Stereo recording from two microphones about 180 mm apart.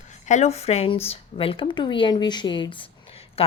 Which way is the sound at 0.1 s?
40° left (ahead or behind).